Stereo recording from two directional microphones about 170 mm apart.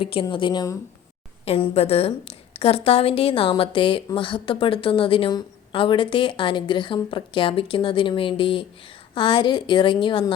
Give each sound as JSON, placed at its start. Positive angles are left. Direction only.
{"t": 0.0, "sound": "a woman's voice", "side_deg": 30}
{"t": 1.5, "sound": "a woman's voice", "side_deg": 35}